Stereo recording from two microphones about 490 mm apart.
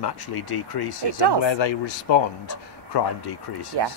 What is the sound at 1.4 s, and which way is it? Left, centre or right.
Speech, left.